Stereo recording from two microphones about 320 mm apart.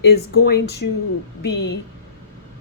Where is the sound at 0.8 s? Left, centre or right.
Left.